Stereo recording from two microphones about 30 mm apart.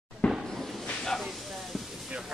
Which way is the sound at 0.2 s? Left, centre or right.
Left.